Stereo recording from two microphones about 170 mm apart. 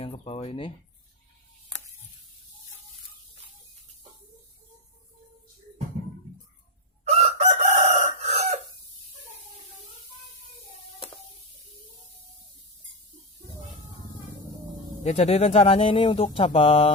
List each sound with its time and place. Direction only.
0.0 s a sound: 35° left (ahead or behind)
7.1 s chicken: 40° right (ahead or behind)
15.0 s speech: 40° left (ahead or behind)